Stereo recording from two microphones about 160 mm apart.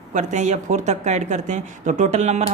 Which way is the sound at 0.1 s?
50° right (ahead or behind).